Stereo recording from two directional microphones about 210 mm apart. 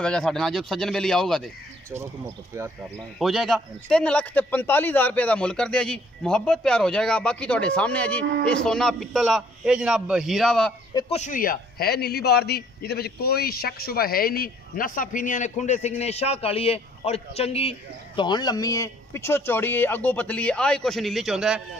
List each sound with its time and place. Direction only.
0.0 s a man's voice: 5° left (ahead or behind)
1.9 s speech: 15° right (ahead or behind)
3.2 s a man's voice: centre (ahead or behind)
11.0 s a man's voice: 30° left (ahead or behind); by 21.6 s centre (ahead or behind)